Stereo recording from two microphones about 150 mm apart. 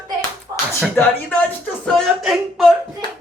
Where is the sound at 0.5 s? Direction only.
25° right (ahead or behind).